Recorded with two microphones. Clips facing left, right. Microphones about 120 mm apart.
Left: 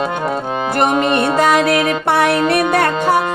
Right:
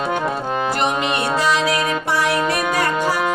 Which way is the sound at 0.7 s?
50° left (ahead or behind).